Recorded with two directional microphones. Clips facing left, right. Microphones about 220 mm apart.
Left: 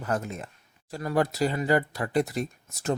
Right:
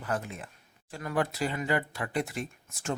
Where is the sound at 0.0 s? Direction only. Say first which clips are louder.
Left 4 dB; 40° left (ahead or behind).